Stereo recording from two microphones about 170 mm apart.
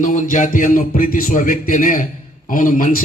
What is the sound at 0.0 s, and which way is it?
Speech, 50° left (ahead or behind).